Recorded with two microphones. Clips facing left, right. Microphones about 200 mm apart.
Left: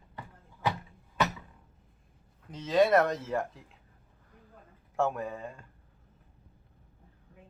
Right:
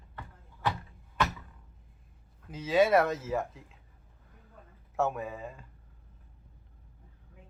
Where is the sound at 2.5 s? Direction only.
5° right (ahead or behind).